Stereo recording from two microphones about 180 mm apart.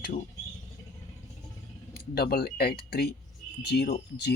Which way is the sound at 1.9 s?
60° left (ahead or behind).